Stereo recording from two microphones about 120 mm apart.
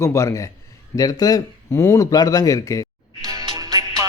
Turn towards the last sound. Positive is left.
turn(degrees=-30)  # may be behind; listen again after turning